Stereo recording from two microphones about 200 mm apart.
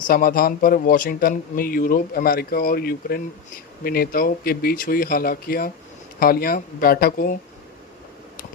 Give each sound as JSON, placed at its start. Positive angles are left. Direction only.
{"t": 0.1, "sound": "a man's voice", "side_deg": 45}